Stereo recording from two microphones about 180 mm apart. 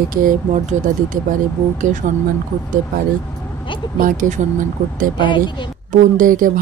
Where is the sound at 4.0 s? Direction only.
50° right (ahead or behind).